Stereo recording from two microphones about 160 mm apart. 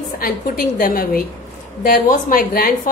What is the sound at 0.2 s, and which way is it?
A woman's voice, 60° left (ahead or behind).